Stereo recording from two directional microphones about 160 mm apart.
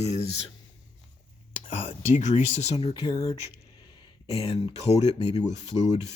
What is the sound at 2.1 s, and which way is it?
Speech, 45° left (ahead or behind).